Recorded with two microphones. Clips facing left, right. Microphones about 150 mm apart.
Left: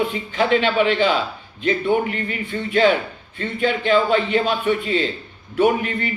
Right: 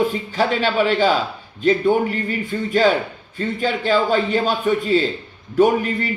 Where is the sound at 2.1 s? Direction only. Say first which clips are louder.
Right 2 dB; 40° right (ahead or behind).